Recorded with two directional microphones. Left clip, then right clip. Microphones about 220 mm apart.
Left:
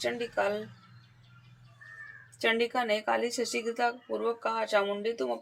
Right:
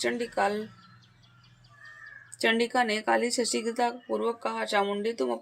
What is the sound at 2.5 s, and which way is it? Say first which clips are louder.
Speech: right 2 dB; 45° right (ahead or behind).